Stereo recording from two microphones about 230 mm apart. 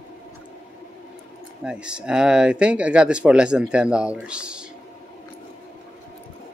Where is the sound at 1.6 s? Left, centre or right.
Centre.